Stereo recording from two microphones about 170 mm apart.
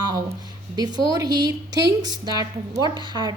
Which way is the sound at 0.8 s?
25° right (ahead or behind).